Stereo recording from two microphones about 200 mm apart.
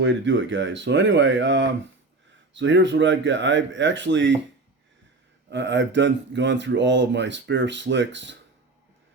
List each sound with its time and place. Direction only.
0.0 s speech: 65° right (ahead or behind)
5.5 s speech: 60° right (ahead or behind)